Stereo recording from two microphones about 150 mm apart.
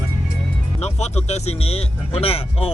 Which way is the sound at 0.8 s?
45° left (ahead or behind).